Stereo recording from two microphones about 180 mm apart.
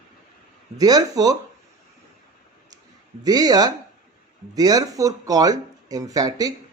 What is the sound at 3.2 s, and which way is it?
Speech, 20° right (ahead or behind).